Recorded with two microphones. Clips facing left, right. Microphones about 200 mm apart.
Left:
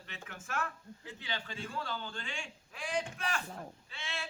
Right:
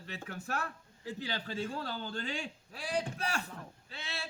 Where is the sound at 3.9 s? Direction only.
35° right (ahead or behind).